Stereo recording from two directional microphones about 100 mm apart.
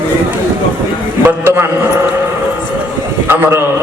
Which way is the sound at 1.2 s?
20° right (ahead or behind).